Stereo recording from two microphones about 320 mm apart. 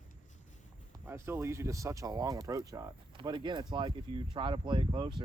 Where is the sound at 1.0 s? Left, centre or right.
Centre.